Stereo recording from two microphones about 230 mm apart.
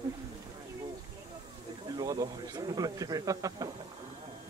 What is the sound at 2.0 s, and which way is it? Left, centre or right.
Speech, centre.